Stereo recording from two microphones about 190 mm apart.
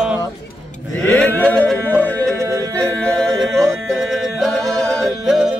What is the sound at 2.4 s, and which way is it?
Music, 15° right (ahead or behind).